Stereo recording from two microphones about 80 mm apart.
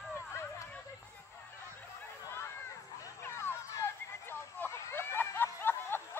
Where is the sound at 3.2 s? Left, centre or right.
Left.